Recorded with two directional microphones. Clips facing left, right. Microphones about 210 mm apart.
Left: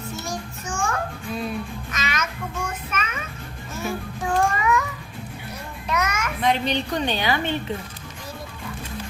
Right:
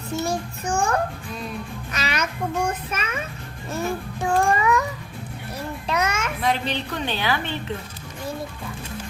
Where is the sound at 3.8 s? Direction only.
35° right (ahead or behind).